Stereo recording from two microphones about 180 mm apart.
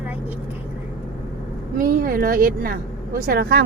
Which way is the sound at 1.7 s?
50° right (ahead or behind).